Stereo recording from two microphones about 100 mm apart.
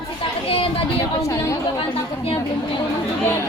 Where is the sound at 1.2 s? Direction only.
30° left (ahead or behind).